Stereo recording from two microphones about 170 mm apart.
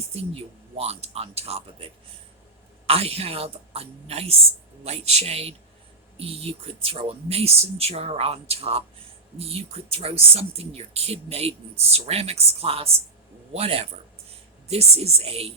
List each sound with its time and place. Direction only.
0.1 s speech: 35° right (ahead or behind)